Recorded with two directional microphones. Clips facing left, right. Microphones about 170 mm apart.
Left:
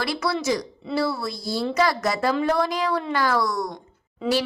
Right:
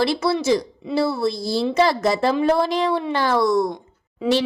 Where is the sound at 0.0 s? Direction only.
25° right (ahead or behind).